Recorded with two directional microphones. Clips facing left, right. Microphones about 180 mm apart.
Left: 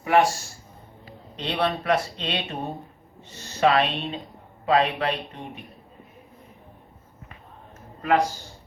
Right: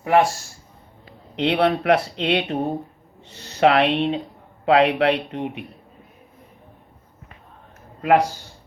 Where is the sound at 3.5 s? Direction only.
70° right (ahead or behind).